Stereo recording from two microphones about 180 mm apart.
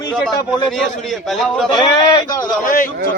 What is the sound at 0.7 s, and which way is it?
Speech, centre (ahead or behind).